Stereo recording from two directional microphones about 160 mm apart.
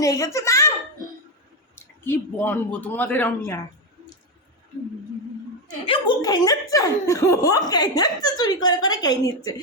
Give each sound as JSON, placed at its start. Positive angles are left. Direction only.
{"t": 0.0, "sound": "a child's voice", "side_deg": 20}
{"t": 2.0, "sound": "speech", "side_deg": 15}
{"t": 5.8, "sound": "speech", "side_deg": 30}